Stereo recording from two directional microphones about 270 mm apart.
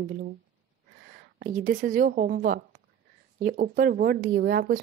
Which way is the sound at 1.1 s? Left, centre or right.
Right.